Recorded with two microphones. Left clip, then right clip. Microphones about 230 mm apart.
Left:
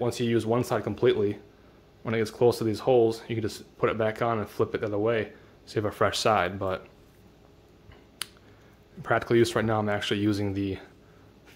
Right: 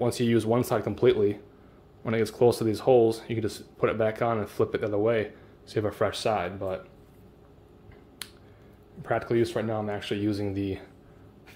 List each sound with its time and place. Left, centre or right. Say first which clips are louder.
0.0 s speech: right 1 dB; centre; by 6.8 s left
9.0 s speech: left 3 dB; centre